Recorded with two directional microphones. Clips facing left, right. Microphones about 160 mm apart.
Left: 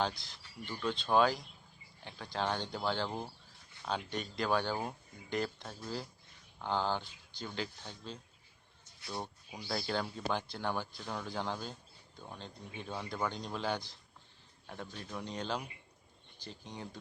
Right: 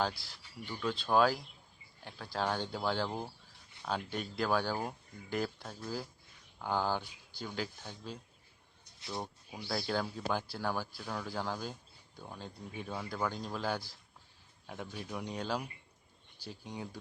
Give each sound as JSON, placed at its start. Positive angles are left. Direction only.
{"t": 0.0, "sound": "speech", "side_deg": -5}
{"t": 9.0, "sound": "a sound", "side_deg": -20}
{"t": 9.6, "sound": "speech", "side_deg": 0}